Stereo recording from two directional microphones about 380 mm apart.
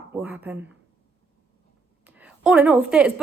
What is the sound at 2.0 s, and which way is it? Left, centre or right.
A woman's voice, centre.